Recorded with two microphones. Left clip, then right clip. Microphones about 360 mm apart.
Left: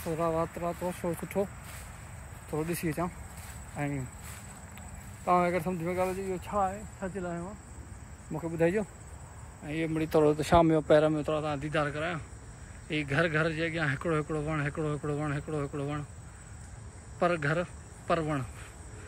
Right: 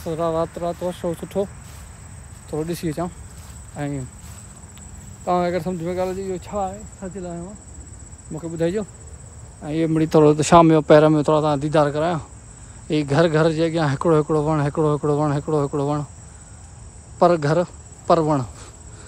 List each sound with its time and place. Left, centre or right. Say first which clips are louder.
0.0 s speech: right 8 dB; centre
2.5 s speech: right 7 dB; centre
5.2 s speech: right 6 dB; centre
9.9 s speech: right 10 dB; right
17.2 s speech: right 12 dB; centre